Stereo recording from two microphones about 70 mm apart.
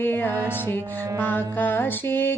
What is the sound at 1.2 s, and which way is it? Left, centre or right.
Mantra, left.